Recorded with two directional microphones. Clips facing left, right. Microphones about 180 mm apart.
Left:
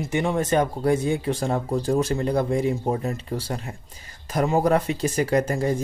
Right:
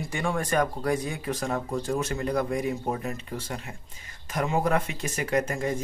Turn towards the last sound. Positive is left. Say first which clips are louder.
# left 5 dB
turn(degrees=35)  # may be behind; listen again after turning